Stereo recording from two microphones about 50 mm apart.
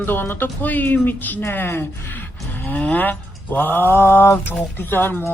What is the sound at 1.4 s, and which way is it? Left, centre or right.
Speech, left.